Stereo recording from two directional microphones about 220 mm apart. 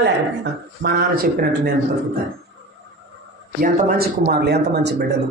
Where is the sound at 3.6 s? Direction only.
40° right (ahead or behind).